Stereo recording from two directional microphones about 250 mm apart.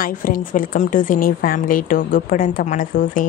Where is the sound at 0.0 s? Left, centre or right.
Left.